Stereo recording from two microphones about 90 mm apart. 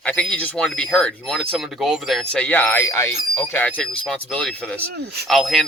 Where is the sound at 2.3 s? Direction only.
15° left (ahead or behind).